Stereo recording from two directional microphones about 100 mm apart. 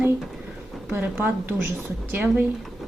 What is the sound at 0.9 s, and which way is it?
A woman's voice, 20° right (ahead or behind).